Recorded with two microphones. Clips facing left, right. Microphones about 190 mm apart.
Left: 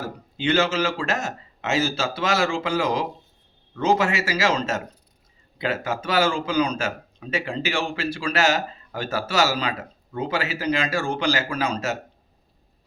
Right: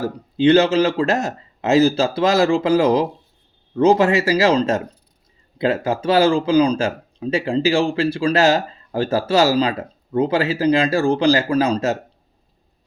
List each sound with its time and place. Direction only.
0.0 s speech: 35° right (ahead or behind)